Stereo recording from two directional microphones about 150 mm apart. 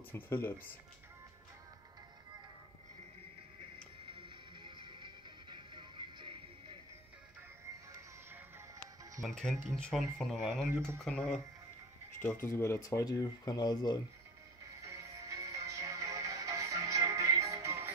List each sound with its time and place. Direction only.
0.1 s speech: 15° left (ahead or behind)
4.0 s music: 35° right (ahead or behind)
9.2 s speech: 5° left (ahead or behind)
12.2 s speech: 15° left (ahead or behind)
14.8 s music: 20° right (ahead or behind)